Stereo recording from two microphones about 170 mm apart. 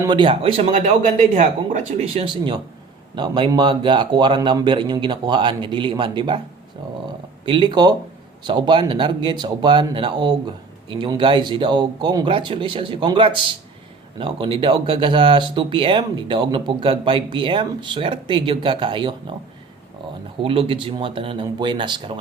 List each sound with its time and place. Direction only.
0.0 s speech: 30° right (ahead or behind)
7.4 s speech: 30° right (ahead or behind)
20.4 s speech: 35° right (ahead or behind)